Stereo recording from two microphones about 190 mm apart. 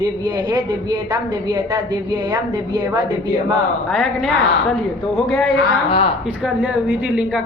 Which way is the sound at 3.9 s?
Centre (ahead or behind).